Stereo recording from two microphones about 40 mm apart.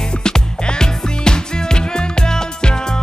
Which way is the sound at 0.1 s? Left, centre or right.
Left.